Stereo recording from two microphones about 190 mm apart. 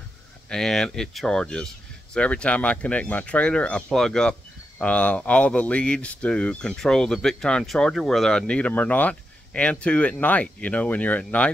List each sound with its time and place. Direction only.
0.5 s speech: 5° left (ahead or behind)